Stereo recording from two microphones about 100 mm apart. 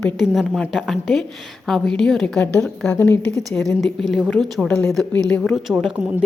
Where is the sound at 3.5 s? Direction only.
5° left (ahead or behind).